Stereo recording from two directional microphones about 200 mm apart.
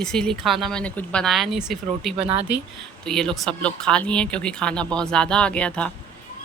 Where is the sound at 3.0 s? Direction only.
Centre (ahead or behind).